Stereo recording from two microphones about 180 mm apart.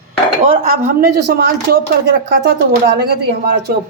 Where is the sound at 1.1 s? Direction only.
60° right (ahead or behind).